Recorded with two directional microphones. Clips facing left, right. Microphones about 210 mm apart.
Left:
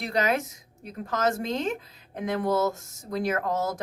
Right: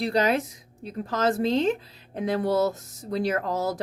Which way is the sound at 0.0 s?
35° right (ahead or behind).